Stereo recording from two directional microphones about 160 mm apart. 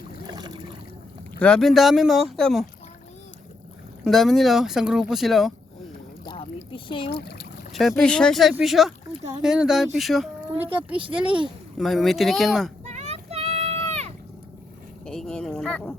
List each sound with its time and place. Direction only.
0.3 s boat: 30° right (ahead or behind)
1.4 s speech: 5° left (ahead or behind)
4.0 s speech: centre (ahead or behind)
6.2 s boat: 35° left (ahead or behind)
6.7 s a sound: 30° left (ahead or behind)
7.1 s speech: 90° left
7.7 s speech: centre (ahead or behind)
12.8 s a sound: 45° right (ahead or behind)
15.0 s a sound: 5° left (ahead or behind)